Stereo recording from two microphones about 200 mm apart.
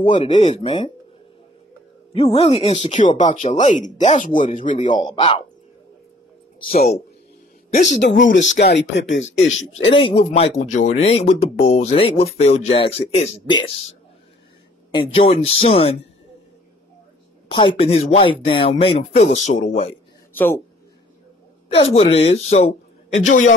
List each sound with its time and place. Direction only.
0.0 s speech: 30° left (ahead or behind)
2.1 s speech: 30° left (ahead or behind)
4.9 s speech: 25° left (ahead or behind)
6.6 s speech: 45° left (ahead or behind)
8.2 s speech: 65° left (ahead or behind)
9.7 s speech: 30° left (ahead or behind)
14.9 s speech: 25° left (ahead or behind)
17.6 s speech: 25° left (ahead or behind)
20.3 s a man's voice: 10° left (ahead or behind)
21.8 s speech: 30° left (ahead or behind)